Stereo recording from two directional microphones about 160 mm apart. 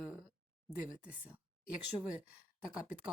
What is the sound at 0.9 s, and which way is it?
Speech, 5° right (ahead or behind).